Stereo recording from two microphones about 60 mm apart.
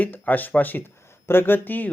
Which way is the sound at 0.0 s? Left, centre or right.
Left.